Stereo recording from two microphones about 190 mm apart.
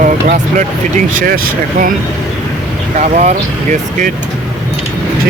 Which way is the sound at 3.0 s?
40° right (ahead or behind).